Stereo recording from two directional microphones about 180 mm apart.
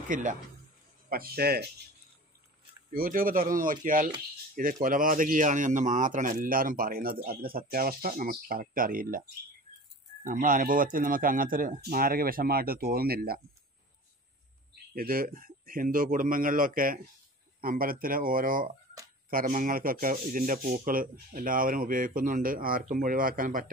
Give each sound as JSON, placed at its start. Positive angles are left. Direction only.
{"t": 0.1, "sound": "speech", "side_deg": -45}
{"t": 1.1, "sound": "speech", "side_deg": -55}
{"t": 2.9, "sound": "speech", "side_deg": -50}
{"t": 10.2, "sound": "speech", "side_deg": -50}
{"t": 15.0, "sound": "speech", "side_deg": -55}